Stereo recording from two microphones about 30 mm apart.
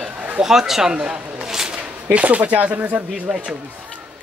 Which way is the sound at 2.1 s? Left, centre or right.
Right.